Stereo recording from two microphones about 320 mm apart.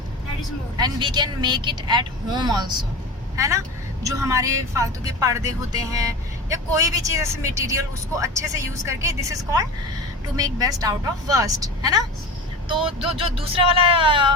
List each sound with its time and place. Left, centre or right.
0.8 s speech: centre